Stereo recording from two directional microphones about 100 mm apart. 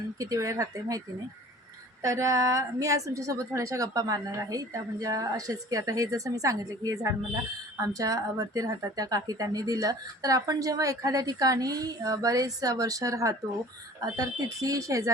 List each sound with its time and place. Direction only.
0.2 s speech: 35° right (ahead or behind)